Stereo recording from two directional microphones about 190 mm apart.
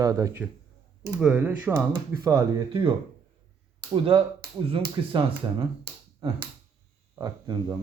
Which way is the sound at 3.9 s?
25° right (ahead or behind).